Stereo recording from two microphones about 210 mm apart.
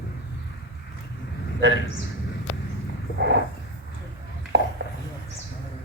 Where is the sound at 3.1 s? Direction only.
55° right (ahead or behind).